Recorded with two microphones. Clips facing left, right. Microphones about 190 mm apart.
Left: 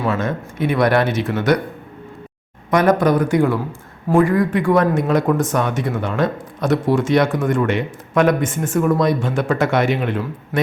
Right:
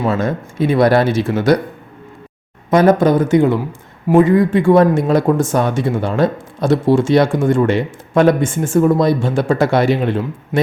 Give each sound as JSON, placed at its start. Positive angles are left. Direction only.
{"t": 0.0, "sound": "speech", "side_deg": -35}
{"t": 2.6, "sound": "speech", "side_deg": -25}